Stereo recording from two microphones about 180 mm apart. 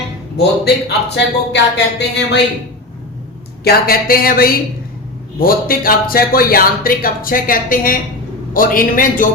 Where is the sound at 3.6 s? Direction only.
60° left (ahead or behind).